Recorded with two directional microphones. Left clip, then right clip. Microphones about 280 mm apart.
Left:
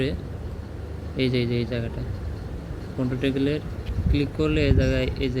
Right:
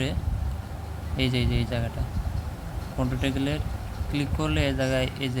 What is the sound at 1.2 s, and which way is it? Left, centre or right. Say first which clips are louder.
Speech: left 3 dB; centre.